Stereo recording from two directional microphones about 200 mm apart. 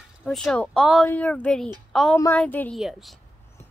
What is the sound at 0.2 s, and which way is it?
A woman's voice, centre (ahead or behind).